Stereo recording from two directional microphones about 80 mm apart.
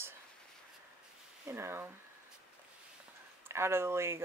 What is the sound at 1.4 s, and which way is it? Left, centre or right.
Speech, right.